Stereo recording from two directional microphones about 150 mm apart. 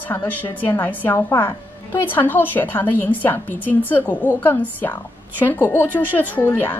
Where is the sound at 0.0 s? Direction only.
10° left (ahead or behind).